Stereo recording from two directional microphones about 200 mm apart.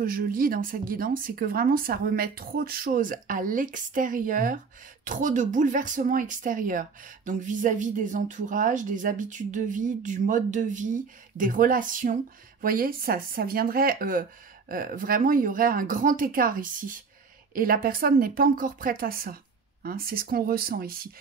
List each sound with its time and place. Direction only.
0.0 s speech: 45° right (ahead or behind)